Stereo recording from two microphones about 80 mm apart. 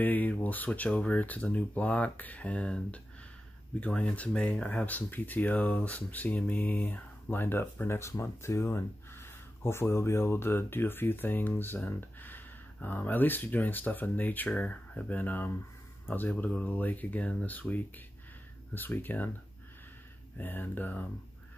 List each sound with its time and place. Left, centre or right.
0.0 s speech: left
20.3 s speech: left